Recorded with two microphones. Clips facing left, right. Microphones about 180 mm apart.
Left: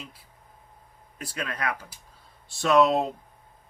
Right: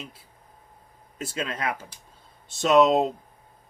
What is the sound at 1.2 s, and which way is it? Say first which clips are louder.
A man's voice: right 2 dB; 25° right (ahead or behind).